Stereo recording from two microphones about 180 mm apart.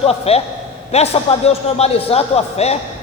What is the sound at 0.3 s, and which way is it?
A man's voice, 35° left (ahead or behind).